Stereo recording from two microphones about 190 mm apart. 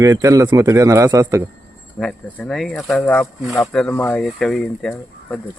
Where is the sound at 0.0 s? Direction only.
15° right (ahead or behind).